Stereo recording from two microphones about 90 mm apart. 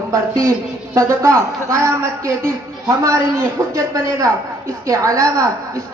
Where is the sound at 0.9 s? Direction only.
35° right (ahead or behind).